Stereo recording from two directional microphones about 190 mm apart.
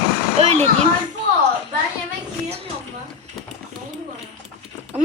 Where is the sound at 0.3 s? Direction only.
35° right (ahead or behind).